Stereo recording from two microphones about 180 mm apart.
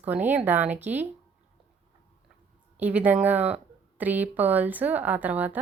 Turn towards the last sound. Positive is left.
turn(degrees=-10)  # may be behind; listen again after turning